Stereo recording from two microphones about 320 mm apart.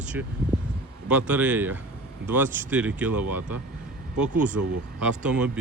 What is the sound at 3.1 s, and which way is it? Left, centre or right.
Speech, right.